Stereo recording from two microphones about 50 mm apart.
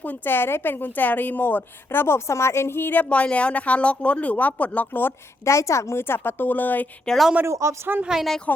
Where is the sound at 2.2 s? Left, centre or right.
Left.